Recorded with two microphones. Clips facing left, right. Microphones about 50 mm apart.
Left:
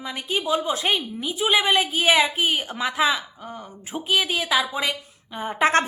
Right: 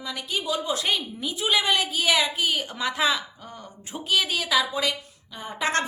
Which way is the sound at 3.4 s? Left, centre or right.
Centre.